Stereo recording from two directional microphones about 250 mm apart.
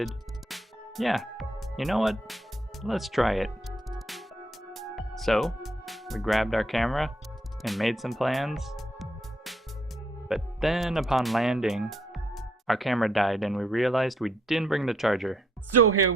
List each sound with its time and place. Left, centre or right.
0.0 s music: centre
10.2 s speech: centre
15.7 s speech: right